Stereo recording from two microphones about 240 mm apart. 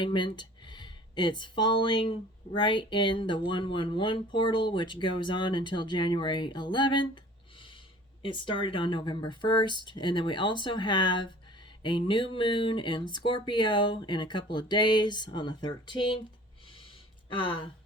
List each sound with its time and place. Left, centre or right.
0.0 s speech: centre
8.2 s speech: centre
17.3 s speech: centre